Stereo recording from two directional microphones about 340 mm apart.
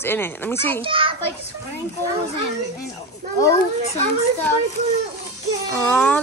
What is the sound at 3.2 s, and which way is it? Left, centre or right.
Children playing, right.